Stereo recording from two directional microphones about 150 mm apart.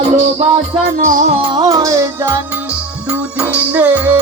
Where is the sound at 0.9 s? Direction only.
60° right (ahead or behind).